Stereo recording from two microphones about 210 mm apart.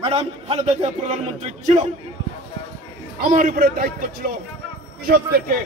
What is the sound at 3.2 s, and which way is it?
A man's voice, 40° right (ahead or behind).